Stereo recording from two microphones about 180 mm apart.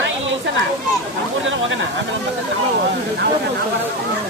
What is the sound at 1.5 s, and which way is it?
Speech, 90° right.